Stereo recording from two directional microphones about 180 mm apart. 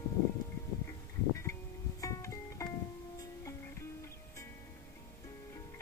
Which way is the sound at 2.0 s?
15° left (ahead or behind).